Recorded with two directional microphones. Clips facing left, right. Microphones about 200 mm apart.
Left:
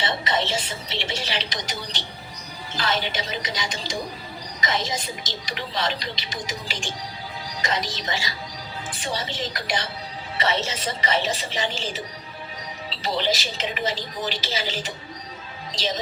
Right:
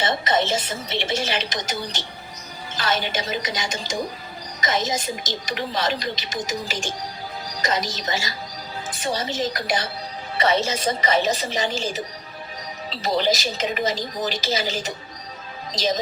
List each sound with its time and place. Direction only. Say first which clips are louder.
0.0 s a woman's voice: right 4 dB; 45° right (ahead or behind)